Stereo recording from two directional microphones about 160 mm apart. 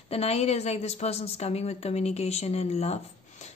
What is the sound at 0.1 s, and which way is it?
A woman's voice, 40° left (ahead or behind).